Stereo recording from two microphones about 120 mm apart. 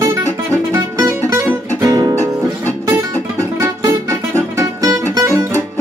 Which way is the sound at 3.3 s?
25° right (ahead or behind).